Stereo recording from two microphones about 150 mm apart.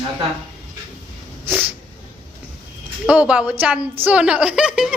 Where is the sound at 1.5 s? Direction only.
10° right (ahead or behind).